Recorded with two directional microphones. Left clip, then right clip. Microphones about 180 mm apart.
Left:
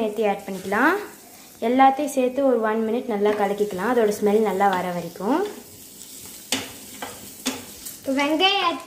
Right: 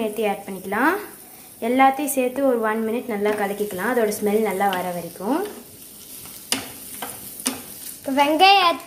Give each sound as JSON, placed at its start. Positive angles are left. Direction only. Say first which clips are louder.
{"t": 0.0, "sound": "a woman's voice", "louder": "left 1 dB", "side_deg": 0}
{"t": 8.1, "sound": "a child's voice", "louder": "right 5 dB", "side_deg": -30}